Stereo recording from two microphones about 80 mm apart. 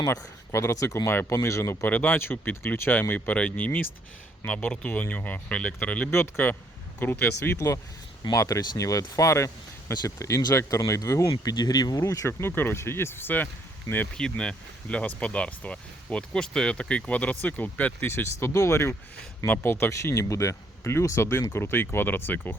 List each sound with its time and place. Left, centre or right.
0.0 s speech: left
1.1 s speech: left
8.2 s speech: left
11.5 s speech: left
14.2 s speech: centre
18.1 s speech: left